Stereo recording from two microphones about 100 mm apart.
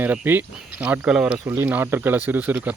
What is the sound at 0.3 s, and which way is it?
Speech, 20° right (ahead or behind).